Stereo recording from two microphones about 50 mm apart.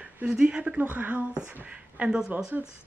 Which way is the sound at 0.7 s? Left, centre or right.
Right.